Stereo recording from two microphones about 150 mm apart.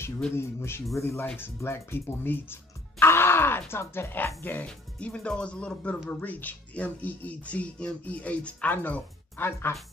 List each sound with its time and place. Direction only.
0.4 s speech: 15° left (ahead or behind)